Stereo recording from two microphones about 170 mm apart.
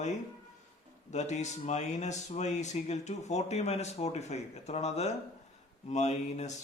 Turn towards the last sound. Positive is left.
turn(degrees=40)  # may be behind; listen again after turning